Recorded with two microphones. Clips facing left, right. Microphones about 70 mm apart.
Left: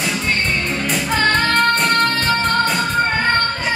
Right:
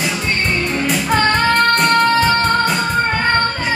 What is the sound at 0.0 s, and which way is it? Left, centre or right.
Music, centre.